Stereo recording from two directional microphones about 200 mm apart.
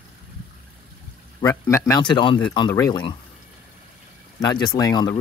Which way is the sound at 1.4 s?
15° left (ahead or behind).